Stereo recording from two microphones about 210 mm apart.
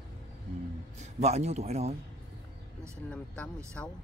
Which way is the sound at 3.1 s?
5° left (ahead or behind).